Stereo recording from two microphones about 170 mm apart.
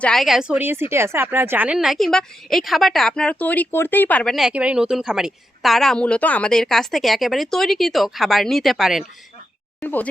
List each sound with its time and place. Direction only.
0.0 s speech: centre (ahead or behind)
9.8 s speech: 10° left (ahead or behind)